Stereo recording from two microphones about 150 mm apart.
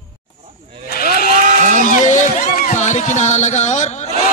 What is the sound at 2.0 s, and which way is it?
Run, 55° left (ahead or behind).